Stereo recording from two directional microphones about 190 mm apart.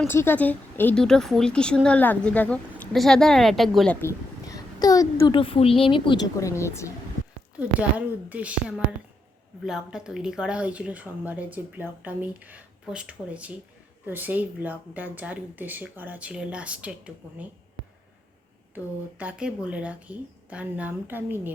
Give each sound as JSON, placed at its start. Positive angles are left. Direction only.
{"t": 0.1, "sound": "a woman's voice", "side_deg": 10}
{"t": 4.0, "sound": "a woman's voice", "side_deg": 20}
{"t": 6.4, "sound": "speech", "side_deg": 15}
{"t": 7.5, "sound": "speech", "side_deg": -5}
{"t": 19.2, "sound": "speech", "side_deg": -5}